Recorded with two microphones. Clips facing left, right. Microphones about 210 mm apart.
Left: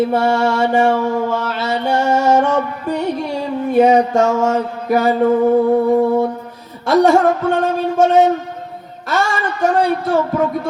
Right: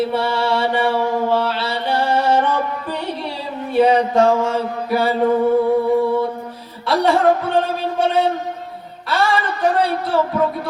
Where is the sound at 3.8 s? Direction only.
45° left (ahead or behind).